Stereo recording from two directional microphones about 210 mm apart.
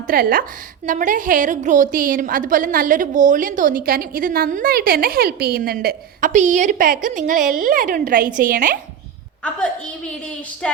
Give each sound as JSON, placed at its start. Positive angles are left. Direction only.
{"t": 0.1, "sound": "a woman's voice", "side_deg": -45}